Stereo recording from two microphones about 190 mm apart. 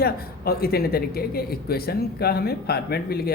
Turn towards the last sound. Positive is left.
turn(degrees=55)  # may be behind; listen again after turning